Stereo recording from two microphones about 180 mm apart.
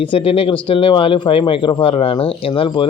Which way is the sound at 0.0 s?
30° left (ahead or behind).